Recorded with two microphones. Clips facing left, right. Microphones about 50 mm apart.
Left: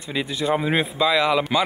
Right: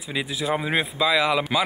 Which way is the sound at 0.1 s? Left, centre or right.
Centre.